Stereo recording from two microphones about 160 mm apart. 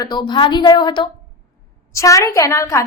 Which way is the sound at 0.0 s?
25° left (ahead or behind).